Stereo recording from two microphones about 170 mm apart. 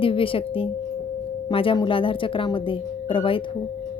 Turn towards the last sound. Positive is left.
turn(degrees=30)  # may be behind; listen again after turning